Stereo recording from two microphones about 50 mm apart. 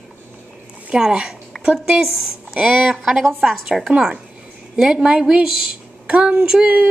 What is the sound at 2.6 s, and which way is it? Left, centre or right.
Speech, right.